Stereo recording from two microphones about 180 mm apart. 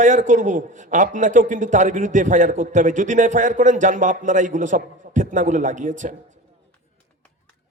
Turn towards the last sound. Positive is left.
turn(degrees=-45)  # may be behind; listen again after turning